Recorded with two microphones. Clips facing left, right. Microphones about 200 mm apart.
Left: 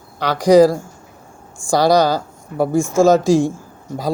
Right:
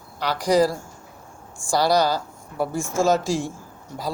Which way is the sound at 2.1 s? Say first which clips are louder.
Left 5 dB; 45° left (ahead or behind).